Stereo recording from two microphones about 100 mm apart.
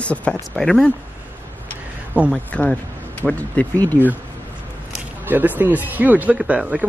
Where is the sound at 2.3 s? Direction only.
15° left (ahead or behind).